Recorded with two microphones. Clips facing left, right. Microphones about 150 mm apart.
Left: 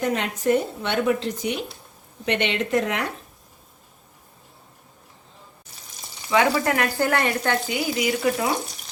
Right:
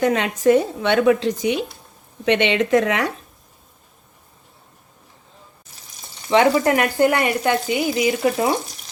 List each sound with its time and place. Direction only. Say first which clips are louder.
0.0 s a woman's voice: right 6 dB; 90° right
6.3 s speech: right 5 dB; 30° right (ahead or behind)